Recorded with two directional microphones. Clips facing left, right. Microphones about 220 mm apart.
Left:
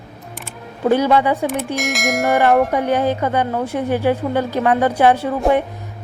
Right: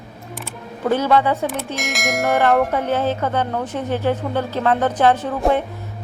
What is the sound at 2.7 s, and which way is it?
A woman's voice, 15° left (ahead or behind).